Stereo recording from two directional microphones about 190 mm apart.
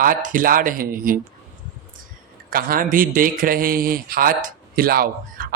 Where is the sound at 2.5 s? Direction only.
50° right (ahead or behind).